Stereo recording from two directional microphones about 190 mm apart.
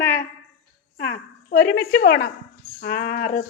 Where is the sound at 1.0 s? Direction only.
55° left (ahead or behind).